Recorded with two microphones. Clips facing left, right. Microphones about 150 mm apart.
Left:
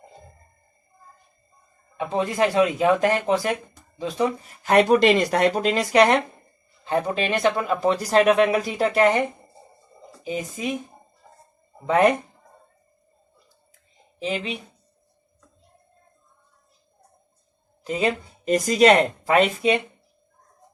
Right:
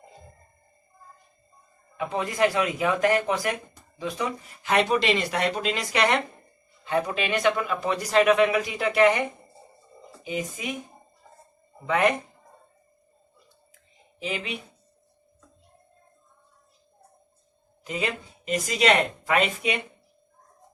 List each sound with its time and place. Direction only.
2.0 s speech: 30° left (ahead or behind)
10.2 s speech: 35° left (ahead or behind)
14.2 s speech: 30° left (ahead or behind)
17.8 s speech: 40° left (ahead or behind)